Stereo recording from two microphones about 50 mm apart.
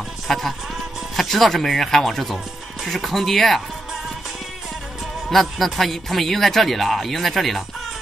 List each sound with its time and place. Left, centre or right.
0.3 s speech: centre
5.3 s speech: centre